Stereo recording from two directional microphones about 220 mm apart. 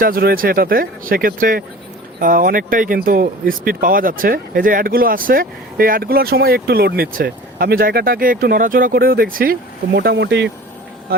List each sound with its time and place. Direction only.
0.0 s speech: 40° right (ahead or behind)